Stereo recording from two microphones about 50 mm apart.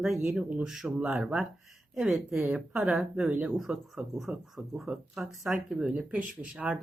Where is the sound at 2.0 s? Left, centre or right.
Centre.